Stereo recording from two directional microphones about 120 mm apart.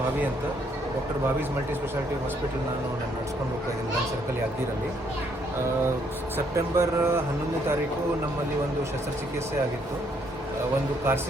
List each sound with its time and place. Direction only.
6.3 s speech: 20° right (ahead or behind)